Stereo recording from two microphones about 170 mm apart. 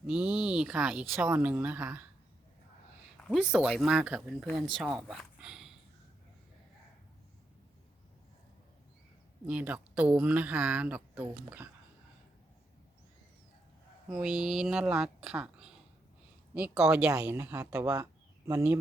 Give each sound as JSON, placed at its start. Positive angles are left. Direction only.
{"t": 0.1, "sound": "speech", "side_deg": -5}
{"t": 3.2, "sound": "speech", "side_deg": 0}
{"t": 4.9, "sound": "a sound", "side_deg": -5}
{"t": 9.5, "sound": "speech", "side_deg": -10}
{"t": 14.1, "sound": "speech", "side_deg": -5}